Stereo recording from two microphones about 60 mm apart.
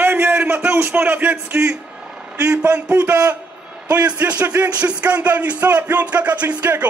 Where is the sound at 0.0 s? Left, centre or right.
Right.